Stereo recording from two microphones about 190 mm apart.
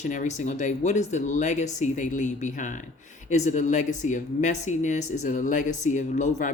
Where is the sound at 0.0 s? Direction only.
40° left (ahead or behind).